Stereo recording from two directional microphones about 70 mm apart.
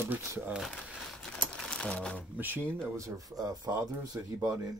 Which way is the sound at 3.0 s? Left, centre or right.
Right.